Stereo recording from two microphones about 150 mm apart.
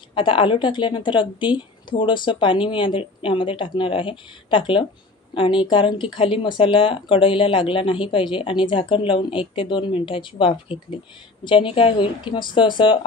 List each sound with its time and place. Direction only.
0.1 s speech: 35° left (ahead or behind)